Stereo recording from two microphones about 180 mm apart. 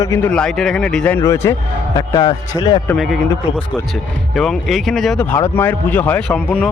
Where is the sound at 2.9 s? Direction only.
Centre (ahead or behind).